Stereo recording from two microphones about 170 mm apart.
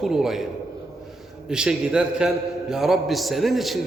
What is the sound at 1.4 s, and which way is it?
A man's voice, 5° right (ahead or behind).